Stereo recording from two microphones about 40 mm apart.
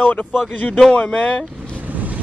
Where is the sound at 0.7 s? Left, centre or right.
Centre.